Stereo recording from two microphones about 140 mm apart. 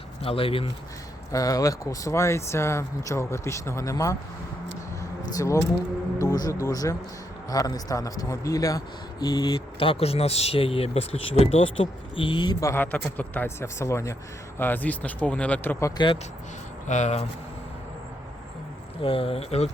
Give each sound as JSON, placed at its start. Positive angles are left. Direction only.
{"t": 0.2, "sound": "speech", "side_deg": 40}
{"t": 1.3, "sound": "speech", "side_deg": 25}
{"t": 5.3, "sound": "speech", "side_deg": 25}
{"t": 16.9, "sound": "speech", "side_deg": 55}
{"t": 19.0, "sound": "speech", "side_deg": 40}